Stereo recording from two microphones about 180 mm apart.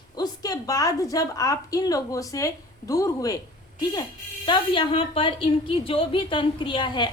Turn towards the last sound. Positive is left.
turn(degrees=25)  # may be behind; listen again after turning